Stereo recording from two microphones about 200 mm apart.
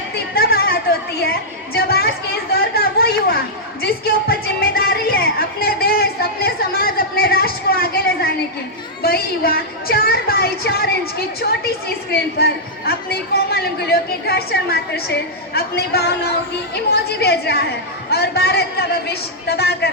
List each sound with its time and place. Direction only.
0.3 s a sound: 50° left (ahead or behind)
2.5 s chatter: 50° left (ahead or behind)
9.0 s a woman's voice: 50° left (ahead or behind)
12.1 s a woman's voice: 50° left (ahead or behind)